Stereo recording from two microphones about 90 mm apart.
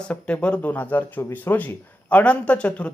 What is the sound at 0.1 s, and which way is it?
Speech, 15° left (ahead or behind).